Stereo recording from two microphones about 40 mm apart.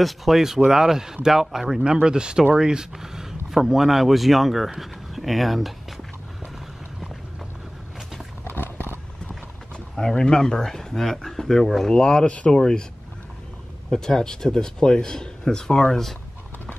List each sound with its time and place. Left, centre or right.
0.0 s speech: centre
1.9 s speech: right; by 5.9 s centre
8.5 s a sound: left
9.9 s speech: centre
11.9 s speech: centre
13.9 s speech: centre